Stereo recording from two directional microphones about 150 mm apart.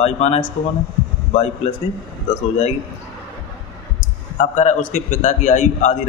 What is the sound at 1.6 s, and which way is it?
Speech, 45° left (ahead or behind).